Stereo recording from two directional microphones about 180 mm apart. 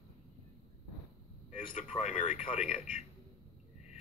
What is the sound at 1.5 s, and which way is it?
Speech, 40° left (ahead or behind).